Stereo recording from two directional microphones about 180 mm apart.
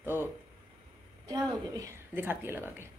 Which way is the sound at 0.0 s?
10° right (ahead or behind).